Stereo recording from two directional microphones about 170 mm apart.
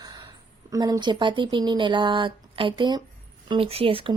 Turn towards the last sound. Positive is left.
turn(degrees=-35)  # may be behind; listen again after turning